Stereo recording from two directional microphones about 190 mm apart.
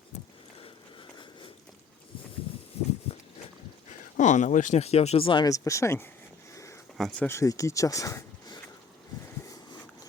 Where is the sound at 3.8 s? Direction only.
40° left (ahead or behind); by 8.5 s 15° left (ahead or behind).